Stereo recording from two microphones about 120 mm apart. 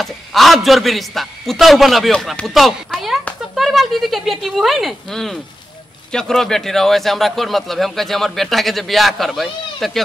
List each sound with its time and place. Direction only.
0.0 s a man's voice: centre (ahead or behind)